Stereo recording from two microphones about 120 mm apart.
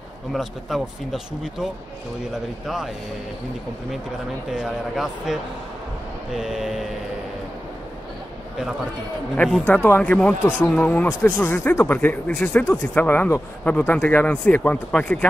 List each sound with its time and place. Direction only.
0.3 s speech: centre (ahead or behind)
4.5 s speech: centre (ahead or behind)
9.8 s speech: 15° left (ahead or behind)
11.2 s speech: 20° left (ahead or behind)